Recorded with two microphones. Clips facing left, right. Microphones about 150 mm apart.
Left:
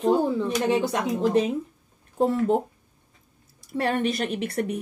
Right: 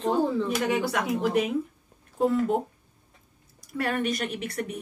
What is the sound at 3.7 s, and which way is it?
A woman's voice, 30° left (ahead or behind).